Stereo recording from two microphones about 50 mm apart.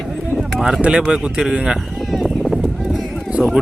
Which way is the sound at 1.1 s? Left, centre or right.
Centre.